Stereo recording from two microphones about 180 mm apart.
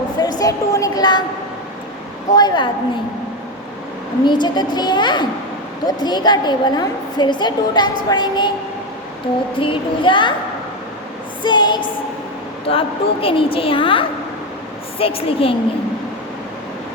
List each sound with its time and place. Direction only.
0.2 s a sound: 20° left (ahead or behind)
2.3 s a woman's voice: 25° left (ahead or behind)
4.3 s a woman's voice: 25° left (ahead or behind)
9.6 s a woman's voice: 30° left (ahead or behind)
11.4 s a woman's voice: 25° left (ahead or behind)